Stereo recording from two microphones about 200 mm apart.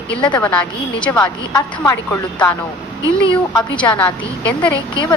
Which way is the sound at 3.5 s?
5° left (ahead or behind).